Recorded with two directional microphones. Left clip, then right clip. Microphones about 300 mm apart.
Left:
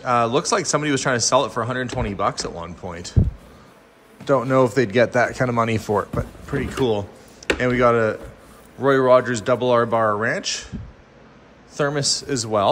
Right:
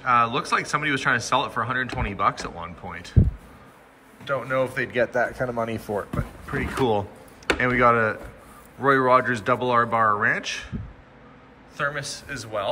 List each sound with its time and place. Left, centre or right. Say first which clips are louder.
0.0 s speech: left 2 dB; centre
4.2 s speech: left 7 dB; centre
6.4 s speech: left 1 dB; centre
11.7 s speech: left 6 dB; centre